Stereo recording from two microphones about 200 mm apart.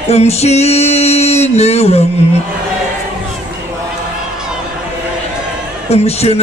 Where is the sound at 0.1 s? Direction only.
30° left (ahead or behind).